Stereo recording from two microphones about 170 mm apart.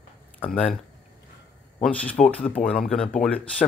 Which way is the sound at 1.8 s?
5° left (ahead or behind).